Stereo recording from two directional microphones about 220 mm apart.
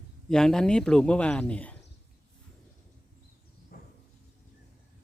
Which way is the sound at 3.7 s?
40° left (ahead or behind).